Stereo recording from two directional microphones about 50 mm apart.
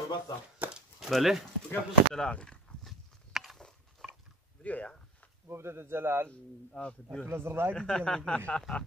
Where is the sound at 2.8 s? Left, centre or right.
Centre.